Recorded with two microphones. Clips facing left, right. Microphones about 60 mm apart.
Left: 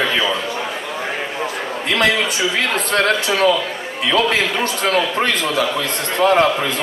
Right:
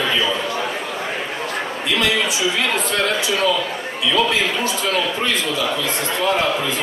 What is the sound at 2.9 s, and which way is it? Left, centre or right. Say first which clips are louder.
A man's voice: left 3 dB; left.